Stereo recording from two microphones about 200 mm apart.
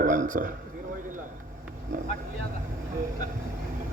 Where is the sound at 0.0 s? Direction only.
40° right (ahead or behind).